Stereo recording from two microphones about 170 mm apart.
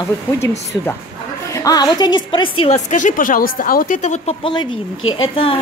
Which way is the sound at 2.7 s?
45° left (ahead or behind).